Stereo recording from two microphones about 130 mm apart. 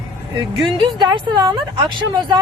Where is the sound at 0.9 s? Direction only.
35° right (ahead or behind).